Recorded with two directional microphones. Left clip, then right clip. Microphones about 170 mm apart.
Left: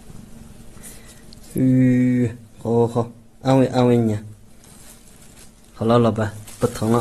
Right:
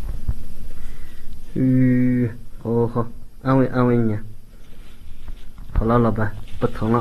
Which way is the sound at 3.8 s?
25° left (ahead or behind).